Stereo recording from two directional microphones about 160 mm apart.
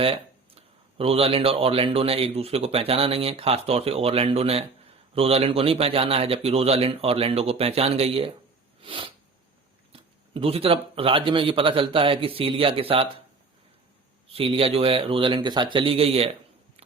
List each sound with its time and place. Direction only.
0.0 s speech: 35° right (ahead or behind)
8.8 s sneeze: 30° right (ahead or behind)
9.9 s speech: 35° right (ahead or behind)
14.3 s speech: 35° right (ahead or behind)